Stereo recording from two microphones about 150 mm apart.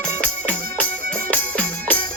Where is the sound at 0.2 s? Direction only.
10° left (ahead or behind).